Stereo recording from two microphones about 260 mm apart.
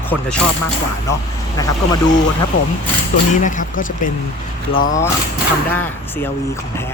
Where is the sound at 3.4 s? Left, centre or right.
Left.